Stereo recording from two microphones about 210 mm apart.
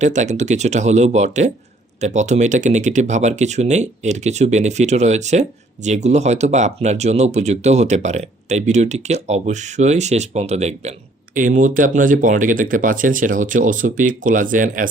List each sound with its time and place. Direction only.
0.0 s speech: 35° right (ahead or behind)